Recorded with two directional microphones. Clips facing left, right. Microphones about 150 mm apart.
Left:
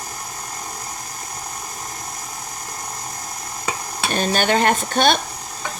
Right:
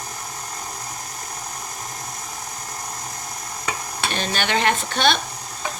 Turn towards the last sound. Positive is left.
turn(degrees=45)  # may be behind; listen again after turning